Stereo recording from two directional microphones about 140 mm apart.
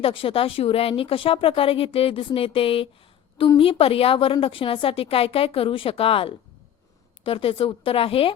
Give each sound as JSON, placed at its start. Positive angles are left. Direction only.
{"t": 0.0, "sound": "a woman's voice", "side_deg": 40}